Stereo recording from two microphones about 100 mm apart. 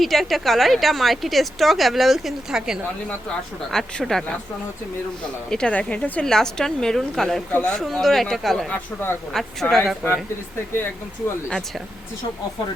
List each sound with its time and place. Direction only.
0.0 s a woman's voice: centre (ahead or behind)
3.7 s a woman's voice: 5° left (ahead or behind)
5.5 s a woman's voice: 10° left (ahead or behind)
8.7 s speech: 20° left (ahead or behind)
9.3 s a woman's voice: centre (ahead or behind)